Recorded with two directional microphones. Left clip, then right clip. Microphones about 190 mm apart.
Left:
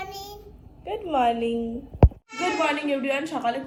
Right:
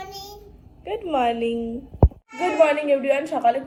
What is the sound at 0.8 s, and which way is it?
Speech, 5° right (ahead or behind).